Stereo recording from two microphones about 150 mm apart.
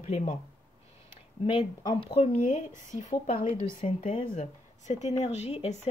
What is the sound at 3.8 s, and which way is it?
Speech, 45° left (ahead or behind).